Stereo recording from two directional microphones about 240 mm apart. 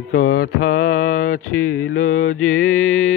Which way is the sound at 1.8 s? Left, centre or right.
Left.